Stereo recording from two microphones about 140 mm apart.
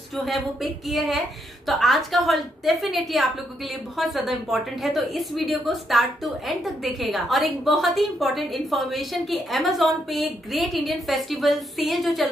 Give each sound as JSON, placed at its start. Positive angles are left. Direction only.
{"t": 0.1, "sound": "a woman's voice", "side_deg": 0}